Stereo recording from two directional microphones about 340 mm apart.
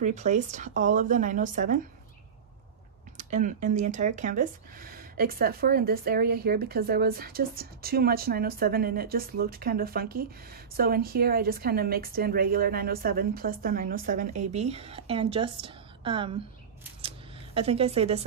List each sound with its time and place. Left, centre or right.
0.0 s speech: right
3.2 s speech: right
17.6 s a woman's voice: centre